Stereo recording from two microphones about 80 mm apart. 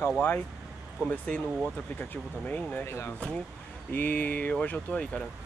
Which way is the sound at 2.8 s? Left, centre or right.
Left.